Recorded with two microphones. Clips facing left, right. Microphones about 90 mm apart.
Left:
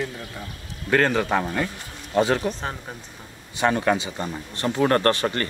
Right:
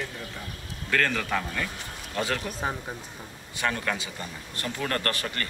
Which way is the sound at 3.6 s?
25° left (ahead or behind).